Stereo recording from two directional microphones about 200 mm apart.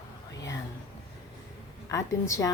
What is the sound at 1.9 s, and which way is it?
Speech, 15° left (ahead or behind).